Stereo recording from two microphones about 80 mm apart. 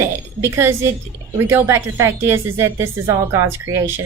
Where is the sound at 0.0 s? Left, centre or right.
Right.